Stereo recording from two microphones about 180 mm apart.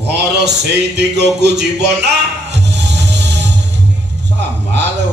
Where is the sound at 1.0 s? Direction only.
70° right (ahead or behind).